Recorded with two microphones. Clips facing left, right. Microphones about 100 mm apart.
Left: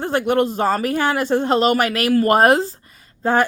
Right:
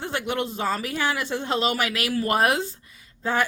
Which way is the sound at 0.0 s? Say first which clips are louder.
Left 9 dB; 50° left (ahead or behind).